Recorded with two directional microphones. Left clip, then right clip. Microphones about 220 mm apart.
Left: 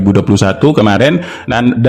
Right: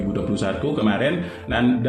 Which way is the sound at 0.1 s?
50° left (ahead or behind).